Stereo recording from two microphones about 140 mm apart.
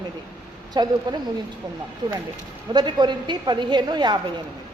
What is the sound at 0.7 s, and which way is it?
Speech, 30° right (ahead or behind).